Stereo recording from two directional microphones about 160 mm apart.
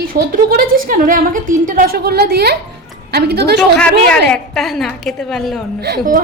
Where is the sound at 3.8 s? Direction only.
5° left (ahead or behind).